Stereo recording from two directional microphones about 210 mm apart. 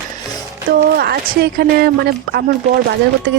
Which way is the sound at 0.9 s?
45° right (ahead or behind).